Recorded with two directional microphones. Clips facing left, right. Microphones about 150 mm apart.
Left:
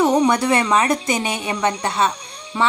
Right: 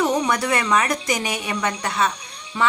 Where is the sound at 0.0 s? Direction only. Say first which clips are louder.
Left 5 dB; 25° left (ahead or behind).